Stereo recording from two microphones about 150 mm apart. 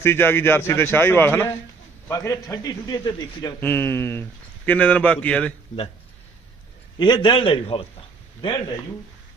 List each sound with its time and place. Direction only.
0.0 s a man's voice: 15° left (ahead or behind)
3.6 s speech: 15° left (ahead or behind)
7.0 s a man's voice: 30° left (ahead or behind)